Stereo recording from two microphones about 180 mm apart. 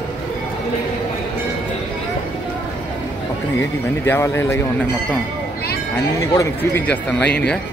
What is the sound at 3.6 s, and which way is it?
Speech, 15° left (ahead or behind).